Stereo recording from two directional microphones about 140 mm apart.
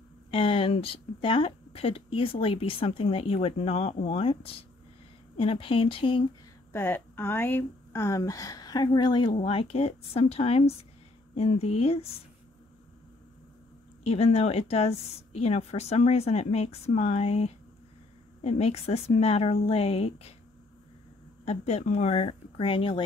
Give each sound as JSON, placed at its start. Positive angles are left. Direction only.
{"t": 0.3, "sound": "speech", "side_deg": 40}
{"t": 6.7, "sound": "a woman's voice", "side_deg": 15}
{"t": 14.0, "sound": "a woman's voice", "side_deg": 45}
{"t": 21.5, "sound": "a woman's voice", "side_deg": 50}